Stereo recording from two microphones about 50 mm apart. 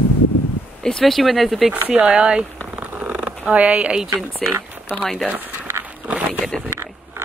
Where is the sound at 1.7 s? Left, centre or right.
Right.